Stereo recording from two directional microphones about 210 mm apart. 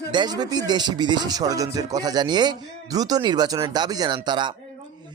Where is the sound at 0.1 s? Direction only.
20° right (ahead or behind).